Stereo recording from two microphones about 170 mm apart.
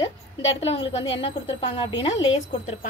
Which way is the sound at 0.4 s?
90° left.